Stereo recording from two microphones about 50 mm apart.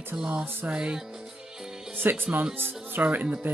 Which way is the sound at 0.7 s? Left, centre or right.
Centre.